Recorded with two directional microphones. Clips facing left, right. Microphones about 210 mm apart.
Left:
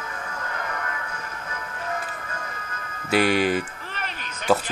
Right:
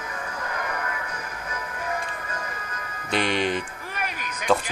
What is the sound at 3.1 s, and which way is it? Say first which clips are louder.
Speech: left 4 dB; 5° left (ahead or behind).